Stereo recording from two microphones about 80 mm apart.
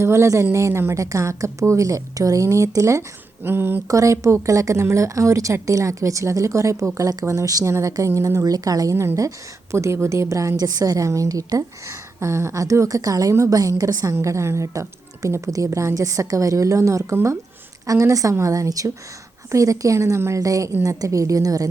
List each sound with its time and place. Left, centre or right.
0.0 s a woman's voice: right
3.4 s speech: right
3.8 s a woman's voice: right
9.0 s a woman's voice: right